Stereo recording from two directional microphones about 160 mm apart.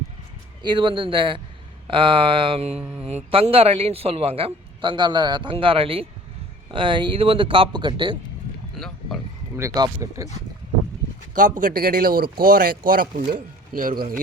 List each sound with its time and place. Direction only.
0.6 s a man's voice: 30° right (ahead or behind)
2.7 s mantra: 5° right (ahead or behind)
3.3 s a man's voice: 35° right (ahead or behind)
8.8 s a sound: centre (ahead or behind)
9.6 s speech: 20° right (ahead or behind)
11.3 s speech: 55° right (ahead or behind)
13.7 s speech: 65° right (ahead or behind)